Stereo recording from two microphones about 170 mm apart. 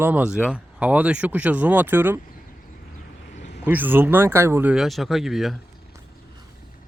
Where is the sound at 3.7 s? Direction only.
10° right (ahead or behind).